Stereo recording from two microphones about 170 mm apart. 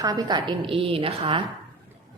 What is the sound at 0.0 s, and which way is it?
A woman's voice, 20° right (ahead or behind).